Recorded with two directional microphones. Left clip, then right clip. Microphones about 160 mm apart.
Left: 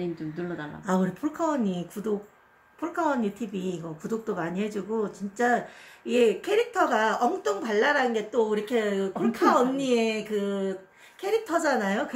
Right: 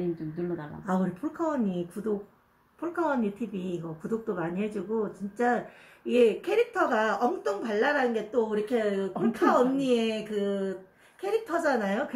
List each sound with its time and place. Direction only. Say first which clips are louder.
0.8 s speech: left 3 dB; 20° left (ahead or behind)